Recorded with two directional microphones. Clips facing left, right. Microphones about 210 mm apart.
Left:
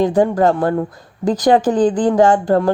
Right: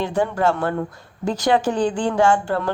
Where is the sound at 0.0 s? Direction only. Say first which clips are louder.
Left 6 dB; 35° left (ahead or behind).